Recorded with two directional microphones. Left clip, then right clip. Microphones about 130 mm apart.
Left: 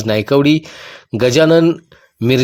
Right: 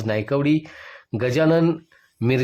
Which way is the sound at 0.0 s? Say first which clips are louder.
Left 9 dB; 40° left (ahead or behind).